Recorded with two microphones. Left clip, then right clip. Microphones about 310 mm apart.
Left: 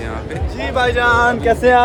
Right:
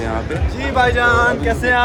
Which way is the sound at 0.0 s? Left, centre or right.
Centre.